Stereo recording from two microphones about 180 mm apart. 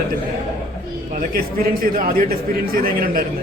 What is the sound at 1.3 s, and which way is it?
A man's voice, 55° right (ahead or behind).